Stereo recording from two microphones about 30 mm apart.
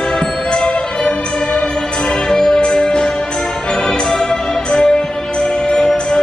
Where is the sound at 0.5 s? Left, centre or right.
Left.